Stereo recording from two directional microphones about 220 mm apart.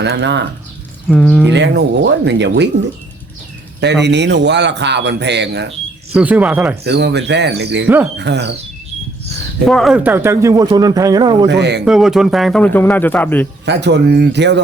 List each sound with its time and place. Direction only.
0.0 s a man's voice: 50° right (ahead or behind)
1.0 s speech: 5° left (ahead or behind)
1.5 s a man's voice: 50° right (ahead or behind)
3.8 s a man's voice: 50° right (ahead or behind)
6.1 s speech: 5° right (ahead or behind)
6.8 s a man's voice: 50° right (ahead or behind)
9.6 s speech: centre (ahead or behind); by 11.4 s 20° right (ahead or behind)
11.4 s a man's voice: 50° right (ahead or behind)
11.9 s speech: centre (ahead or behind)
13.7 s a man's voice: 50° right (ahead or behind)